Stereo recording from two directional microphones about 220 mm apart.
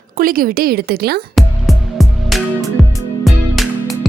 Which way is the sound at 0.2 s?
40° right (ahead or behind).